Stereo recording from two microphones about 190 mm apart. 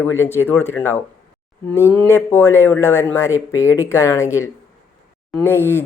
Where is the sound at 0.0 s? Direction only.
15° left (ahead or behind).